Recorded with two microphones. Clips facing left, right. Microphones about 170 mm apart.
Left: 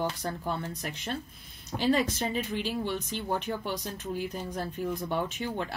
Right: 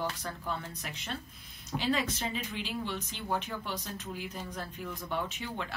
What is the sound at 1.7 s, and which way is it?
Speech, 40° left (ahead or behind).